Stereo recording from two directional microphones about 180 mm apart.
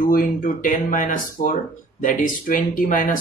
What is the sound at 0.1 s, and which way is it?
Speech, 50° left (ahead or behind).